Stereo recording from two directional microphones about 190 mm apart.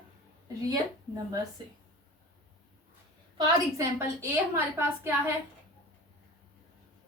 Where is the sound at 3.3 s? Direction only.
20° right (ahead or behind).